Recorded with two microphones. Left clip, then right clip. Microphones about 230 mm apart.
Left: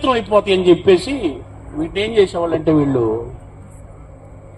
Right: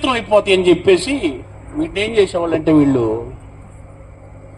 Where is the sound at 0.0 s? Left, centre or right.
Right.